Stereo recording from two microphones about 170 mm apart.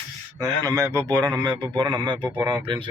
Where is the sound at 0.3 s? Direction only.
20° right (ahead or behind).